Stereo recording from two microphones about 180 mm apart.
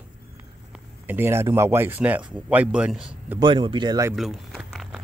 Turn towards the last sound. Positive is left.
turn(degrees=0)  # may be behind; listen again after turning